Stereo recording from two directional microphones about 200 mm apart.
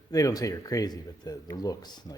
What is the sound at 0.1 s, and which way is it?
Speech, 20° left (ahead or behind).